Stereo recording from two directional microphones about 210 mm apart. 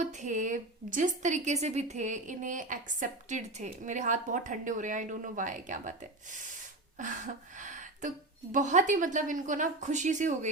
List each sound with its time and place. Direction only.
0.0 s a woman's voice: 35° right (ahead or behind)
7.0 s a sound: 35° right (ahead or behind)
8.5 s a woman's voice: 35° right (ahead or behind)